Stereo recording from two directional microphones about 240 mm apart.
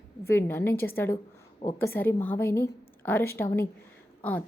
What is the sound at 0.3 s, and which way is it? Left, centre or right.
Speech, centre.